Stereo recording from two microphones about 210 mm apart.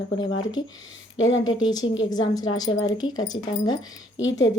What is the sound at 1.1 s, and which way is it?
Speech, 70° left (ahead or behind).